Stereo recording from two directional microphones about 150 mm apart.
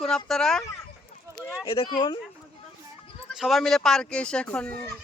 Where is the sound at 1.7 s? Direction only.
35° left (ahead or behind).